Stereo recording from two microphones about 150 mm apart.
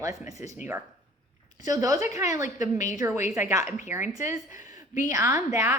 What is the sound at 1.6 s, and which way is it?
A woman's voice, 25° right (ahead or behind).